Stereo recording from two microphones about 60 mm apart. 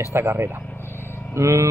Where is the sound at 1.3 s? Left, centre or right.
Right.